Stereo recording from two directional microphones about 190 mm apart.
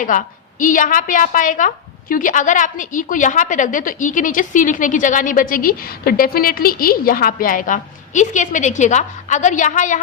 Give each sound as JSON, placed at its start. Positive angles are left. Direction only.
{"t": 0.0, "sound": "a woman's voice", "side_deg": 40}